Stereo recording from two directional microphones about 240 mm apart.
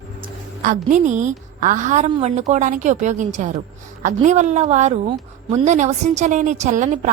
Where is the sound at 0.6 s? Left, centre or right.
Right.